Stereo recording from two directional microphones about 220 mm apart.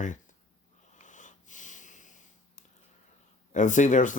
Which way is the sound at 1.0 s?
35° left (ahead or behind).